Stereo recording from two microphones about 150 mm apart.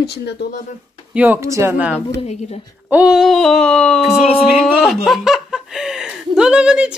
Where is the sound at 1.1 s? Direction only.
15° right (ahead or behind).